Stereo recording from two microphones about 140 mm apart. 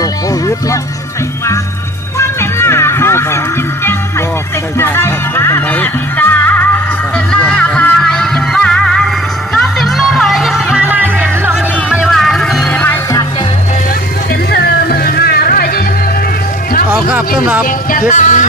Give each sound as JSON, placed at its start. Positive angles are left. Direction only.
{"t": 0.0, "sound": "music", "side_deg": 25}
{"t": 2.1, "sound": "music", "side_deg": 20}
{"t": 4.8, "sound": "music", "side_deg": 15}
{"t": 14.5, "sound": "music", "side_deg": 90}
{"t": 16.9, "sound": "speech", "side_deg": -10}
{"t": 18.1, "sound": "speech", "side_deg": 60}